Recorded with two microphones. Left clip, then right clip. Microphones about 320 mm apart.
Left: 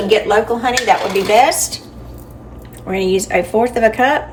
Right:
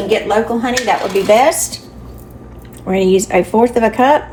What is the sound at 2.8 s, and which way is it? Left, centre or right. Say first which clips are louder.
A woman's voice: right 4 dB; centre.